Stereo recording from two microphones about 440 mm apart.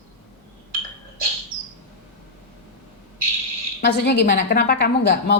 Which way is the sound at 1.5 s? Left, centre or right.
Right.